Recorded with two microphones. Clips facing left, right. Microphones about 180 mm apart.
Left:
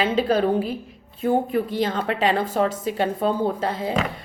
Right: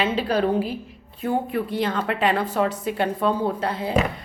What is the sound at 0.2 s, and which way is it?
A woman's voice, 50° left (ahead or behind).